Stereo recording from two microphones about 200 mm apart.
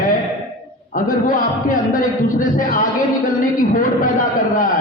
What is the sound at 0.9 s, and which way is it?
A man's voice, 45° left (ahead or behind).